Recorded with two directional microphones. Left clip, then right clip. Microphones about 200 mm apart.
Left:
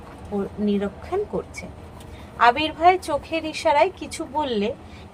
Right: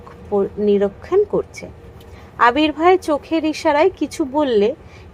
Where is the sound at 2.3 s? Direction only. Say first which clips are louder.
Right 4 dB; 35° right (ahead or behind).